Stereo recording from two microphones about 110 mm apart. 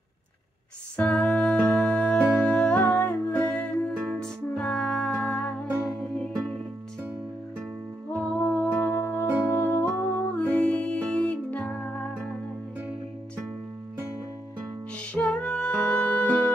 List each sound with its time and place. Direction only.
0.9 s music: 10° left (ahead or behind)
8.1 s music: 15° left (ahead or behind)
15.1 s music: 10° left (ahead or behind)